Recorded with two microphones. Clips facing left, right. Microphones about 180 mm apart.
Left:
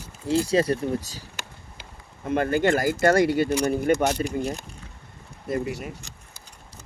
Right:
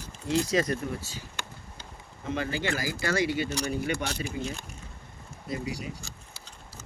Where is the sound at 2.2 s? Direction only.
55° left (ahead or behind).